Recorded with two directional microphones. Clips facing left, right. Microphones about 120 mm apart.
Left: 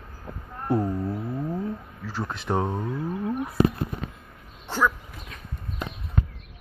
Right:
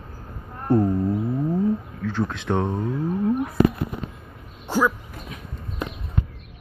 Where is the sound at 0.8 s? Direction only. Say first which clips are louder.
Right 6 dB; 5° right (ahead or behind).